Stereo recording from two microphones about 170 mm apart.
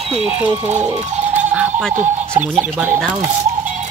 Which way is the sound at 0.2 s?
10° right (ahead or behind).